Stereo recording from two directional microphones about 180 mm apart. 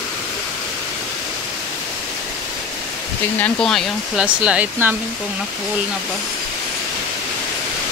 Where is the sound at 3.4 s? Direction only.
5° left (ahead or behind).